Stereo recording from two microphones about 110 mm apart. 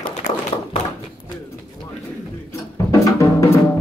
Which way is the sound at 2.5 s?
30° left (ahead or behind).